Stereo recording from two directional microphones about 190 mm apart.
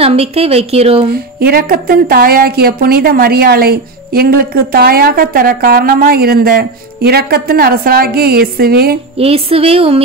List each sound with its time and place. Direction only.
0.0 s a woman's voice: 30° right (ahead or behind)
1.1 s a woman's voice: 55° right (ahead or behind)
9.2 s a woman's voice: 30° right (ahead or behind)